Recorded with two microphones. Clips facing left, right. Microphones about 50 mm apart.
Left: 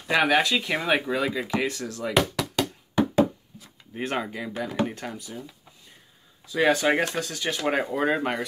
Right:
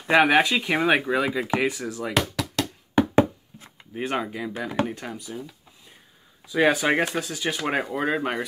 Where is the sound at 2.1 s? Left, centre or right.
Centre.